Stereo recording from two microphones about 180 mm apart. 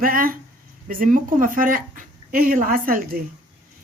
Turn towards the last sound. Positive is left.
turn(degrees=-50)  # may be behind; listen again after turning